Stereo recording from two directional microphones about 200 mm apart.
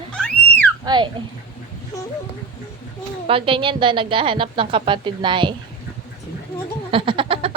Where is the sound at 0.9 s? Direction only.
20° right (ahead or behind).